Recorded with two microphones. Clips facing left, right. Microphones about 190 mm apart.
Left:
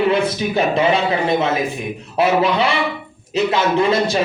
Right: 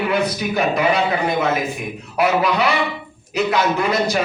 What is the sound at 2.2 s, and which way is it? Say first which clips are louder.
A man's voice: left 2 dB; 25° left (ahead or behind).